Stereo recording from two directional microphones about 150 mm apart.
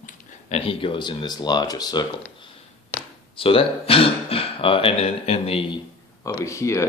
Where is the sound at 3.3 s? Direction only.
35° left (ahead or behind).